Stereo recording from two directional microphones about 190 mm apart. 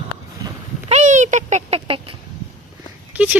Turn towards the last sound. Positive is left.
turn(degrees=-5)  # may be behind; listen again after turning